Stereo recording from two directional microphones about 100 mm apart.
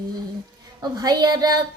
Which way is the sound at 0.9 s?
40° right (ahead or behind).